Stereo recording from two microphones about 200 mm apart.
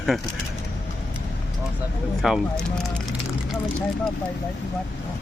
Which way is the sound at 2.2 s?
Centre (ahead or behind).